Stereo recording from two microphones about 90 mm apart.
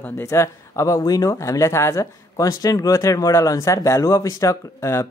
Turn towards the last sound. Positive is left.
turn(degrees=35)  # may be behind; listen again after turning